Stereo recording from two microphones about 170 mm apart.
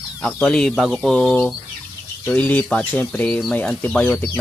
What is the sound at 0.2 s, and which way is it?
Speech, 5° left (ahead or behind).